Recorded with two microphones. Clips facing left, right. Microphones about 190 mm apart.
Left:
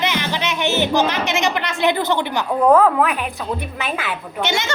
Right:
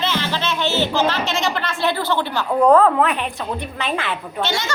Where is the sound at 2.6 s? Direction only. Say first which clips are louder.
Even; centre (ahead or behind).